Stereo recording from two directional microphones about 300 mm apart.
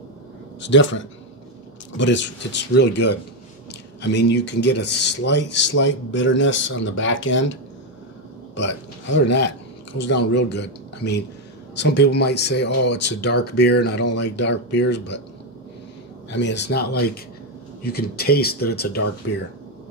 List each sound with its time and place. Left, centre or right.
0.6 s speech: left
8.5 s speech: left
16.3 s speech: left